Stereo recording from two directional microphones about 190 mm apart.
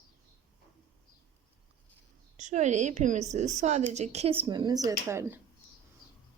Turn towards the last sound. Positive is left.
turn(degrees=-15)  # may be behind; listen again after turning